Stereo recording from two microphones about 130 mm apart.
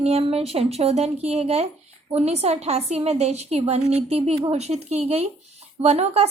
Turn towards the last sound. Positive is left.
turn(degrees=-55)  # may be behind; listen again after turning